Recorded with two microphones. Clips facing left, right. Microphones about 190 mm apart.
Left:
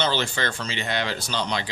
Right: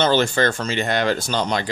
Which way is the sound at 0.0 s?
45° right (ahead or behind).